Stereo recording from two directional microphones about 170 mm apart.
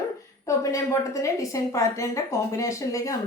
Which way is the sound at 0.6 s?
20° left (ahead or behind).